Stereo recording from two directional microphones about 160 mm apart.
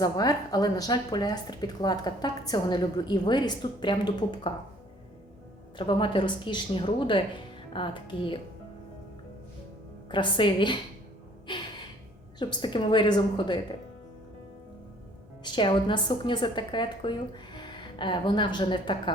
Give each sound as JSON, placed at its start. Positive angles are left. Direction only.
{"t": 0.0, "sound": "speech", "side_deg": 25}
{"t": 5.7, "sound": "speech", "side_deg": 30}
{"t": 10.1, "sound": "speech", "side_deg": 30}
{"t": 12.4, "sound": "speech", "side_deg": 25}
{"t": 15.4, "sound": "speech", "side_deg": 30}